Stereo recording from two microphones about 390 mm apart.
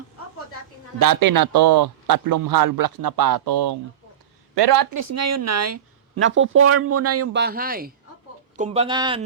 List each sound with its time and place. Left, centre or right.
0.9 s a man's voice: right
4.9 s speech: right; by 9.2 s centre